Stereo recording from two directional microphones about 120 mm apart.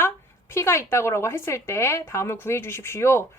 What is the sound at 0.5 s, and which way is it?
A woman's voice, 25° left (ahead or behind).